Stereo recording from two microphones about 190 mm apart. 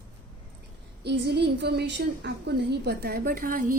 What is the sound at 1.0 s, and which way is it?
A woman's voice, 60° right (ahead or behind).